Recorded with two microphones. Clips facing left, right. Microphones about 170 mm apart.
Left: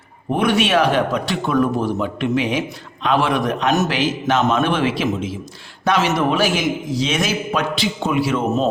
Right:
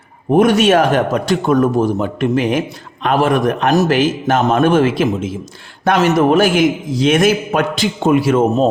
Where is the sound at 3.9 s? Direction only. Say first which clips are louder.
Right 4 dB; 50° right (ahead or behind).